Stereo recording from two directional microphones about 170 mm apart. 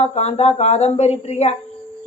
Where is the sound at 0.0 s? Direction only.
40° left (ahead or behind).